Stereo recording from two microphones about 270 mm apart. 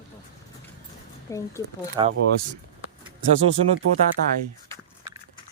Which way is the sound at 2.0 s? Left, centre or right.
Centre.